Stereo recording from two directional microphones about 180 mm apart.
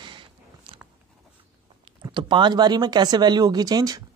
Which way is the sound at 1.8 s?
25° right (ahead or behind).